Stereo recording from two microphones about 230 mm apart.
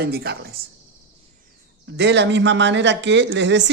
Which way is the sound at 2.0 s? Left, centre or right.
Right.